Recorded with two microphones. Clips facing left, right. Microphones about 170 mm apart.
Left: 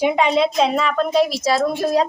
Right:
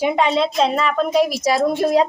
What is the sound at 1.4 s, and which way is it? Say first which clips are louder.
Speech: right 1 dB; 15° right (ahead or behind).